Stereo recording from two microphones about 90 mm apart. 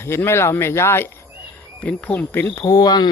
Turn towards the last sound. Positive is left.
turn(degrees=50)  # may be behind; listen again after turning